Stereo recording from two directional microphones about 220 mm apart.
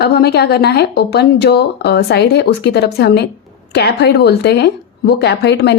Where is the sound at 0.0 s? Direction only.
45° left (ahead or behind).